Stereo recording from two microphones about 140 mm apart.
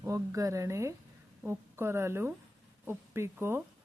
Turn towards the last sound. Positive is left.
turn(degrees=-15)  # may be behind; listen again after turning